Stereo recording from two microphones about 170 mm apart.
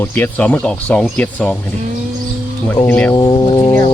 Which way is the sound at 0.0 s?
10° left (ahead or behind).